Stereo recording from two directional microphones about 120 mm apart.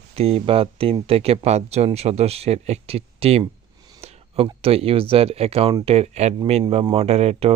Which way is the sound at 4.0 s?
55° right (ahead or behind).